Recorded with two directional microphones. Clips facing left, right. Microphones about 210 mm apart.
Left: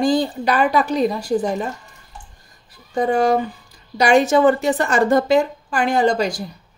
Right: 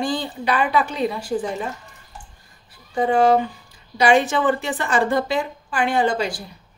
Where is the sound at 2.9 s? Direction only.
40° left (ahead or behind).